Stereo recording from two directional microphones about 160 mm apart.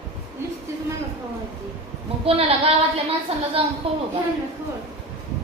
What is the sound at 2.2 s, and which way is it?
A woman's voice, 35° right (ahead or behind).